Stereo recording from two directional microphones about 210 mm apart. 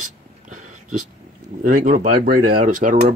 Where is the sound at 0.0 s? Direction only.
35° right (ahead or behind).